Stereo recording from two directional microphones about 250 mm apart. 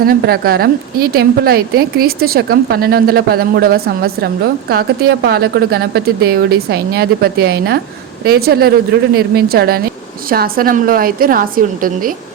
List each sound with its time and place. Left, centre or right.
0.0 s a woman's voice: right